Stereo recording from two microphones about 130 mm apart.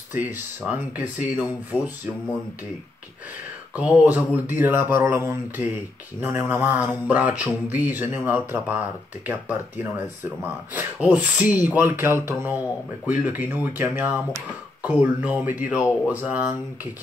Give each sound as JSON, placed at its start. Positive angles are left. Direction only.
{"t": 0.1, "sound": "speech", "side_deg": -15}
{"t": 3.7, "sound": "speech", "side_deg": -10}